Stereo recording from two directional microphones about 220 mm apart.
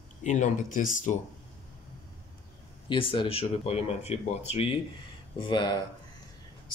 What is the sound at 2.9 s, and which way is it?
Speech, 20° left (ahead or behind).